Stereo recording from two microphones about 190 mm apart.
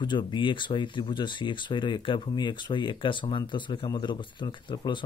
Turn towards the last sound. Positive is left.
turn(degrees=25)  # may be behind; listen again after turning